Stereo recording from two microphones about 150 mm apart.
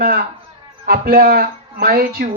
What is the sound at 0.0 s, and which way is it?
Speech, 90° right.